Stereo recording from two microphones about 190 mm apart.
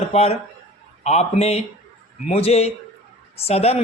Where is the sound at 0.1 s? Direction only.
35° left (ahead or behind).